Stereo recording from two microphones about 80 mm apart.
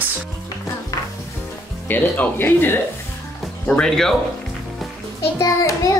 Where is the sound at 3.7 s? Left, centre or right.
Centre.